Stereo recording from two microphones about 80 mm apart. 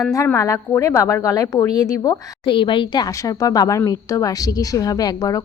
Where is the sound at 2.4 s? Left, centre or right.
Left.